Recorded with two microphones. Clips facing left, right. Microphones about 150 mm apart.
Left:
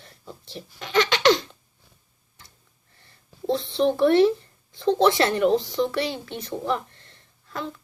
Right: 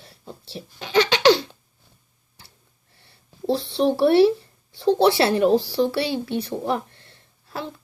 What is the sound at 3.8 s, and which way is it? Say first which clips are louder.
Speech: right 2 dB; 35° right (ahead or behind).